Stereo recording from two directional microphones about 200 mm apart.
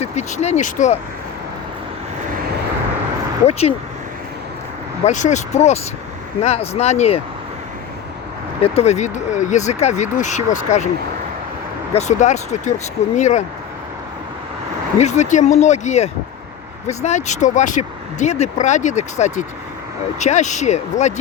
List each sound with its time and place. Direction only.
0.0 s speech: 35° left (ahead or behind)
3.4 s speech: 30° left (ahead or behind)
5.0 s speech: 35° left (ahead or behind)
8.6 s speech: 30° left (ahead or behind)
11.9 s speech: 35° left (ahead or behind)
14.9 s speech: 35° left (ahead or behind)